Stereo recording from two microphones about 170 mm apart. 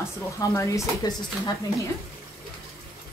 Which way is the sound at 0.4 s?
20° left (ahead or behind).